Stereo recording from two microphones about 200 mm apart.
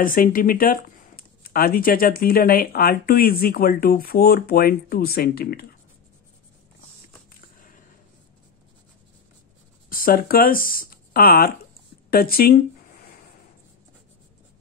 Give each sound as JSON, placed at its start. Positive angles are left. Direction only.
{"t": 0.0, "sound": "speech", "side_deg": 45}
{"t": 9.8, "sound": "speech", "side_deg": 45}
{"t": 12.1, "sound": "a sound", "side_deg": 50}